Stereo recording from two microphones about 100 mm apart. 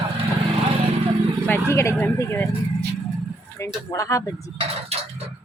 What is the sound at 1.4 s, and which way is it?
Speech, 25° left (ahead or behind).